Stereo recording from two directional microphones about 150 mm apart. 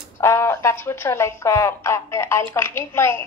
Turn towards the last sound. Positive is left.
turn(degrees=15)  # may be behind; listen again after turning